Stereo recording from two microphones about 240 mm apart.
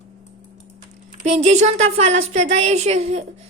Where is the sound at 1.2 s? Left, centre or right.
Right.